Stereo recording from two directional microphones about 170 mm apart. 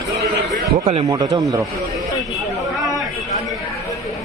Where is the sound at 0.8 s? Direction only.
35° right (ahead or behind).